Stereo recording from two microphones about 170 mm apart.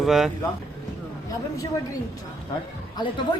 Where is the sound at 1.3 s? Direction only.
20° left (ahead or behind).